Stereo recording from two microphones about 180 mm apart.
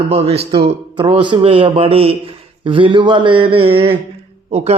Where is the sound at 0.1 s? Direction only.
35° right (ahead or behind).